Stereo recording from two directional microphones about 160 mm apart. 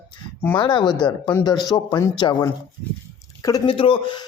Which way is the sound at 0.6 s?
30° left (ahead or behind).